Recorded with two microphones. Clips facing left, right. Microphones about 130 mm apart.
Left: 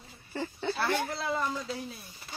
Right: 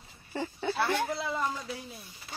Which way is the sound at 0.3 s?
10° right (ahead or behind).